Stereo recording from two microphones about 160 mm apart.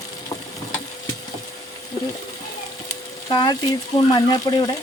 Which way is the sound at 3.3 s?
25° left (ahead or behind).